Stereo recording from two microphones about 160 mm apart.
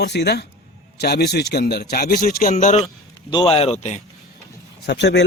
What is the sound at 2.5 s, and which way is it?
Speech, 45° left (ahead or behind).